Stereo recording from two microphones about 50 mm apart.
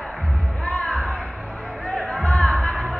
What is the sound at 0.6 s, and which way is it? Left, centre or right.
Music, left.